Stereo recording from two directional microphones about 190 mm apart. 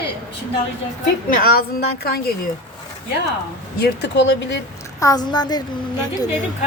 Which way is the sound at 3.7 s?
60° left (ahead or behind).